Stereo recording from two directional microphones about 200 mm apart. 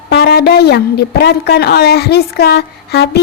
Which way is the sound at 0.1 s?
55° left (ahead or behind).